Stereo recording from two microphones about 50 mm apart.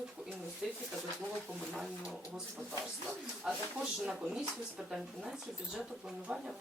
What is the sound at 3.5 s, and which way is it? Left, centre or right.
Speech, centre.